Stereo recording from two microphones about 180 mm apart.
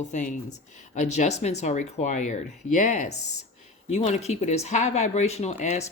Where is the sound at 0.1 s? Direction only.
45° left (ahead or behind).